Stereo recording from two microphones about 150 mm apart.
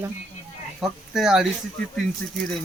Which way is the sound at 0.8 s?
Centre (ahead or behind).